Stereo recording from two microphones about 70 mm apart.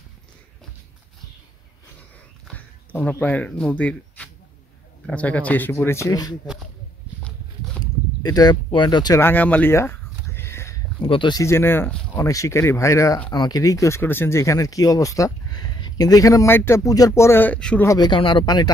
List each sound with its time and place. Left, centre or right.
2.5 s speech: left
7.8 s a sound: left
9.2 s speech: left
9.7 s a sound: left
11.0 s speech: left
11.4 s speech: left
12.2 s speech: left
13.3 s speech: left
14.0 s speech: left
14.4 s speech: left
15.6 s a sound: left
16.4 s speech: left
16.8 s speech: left
17.9 s speech: left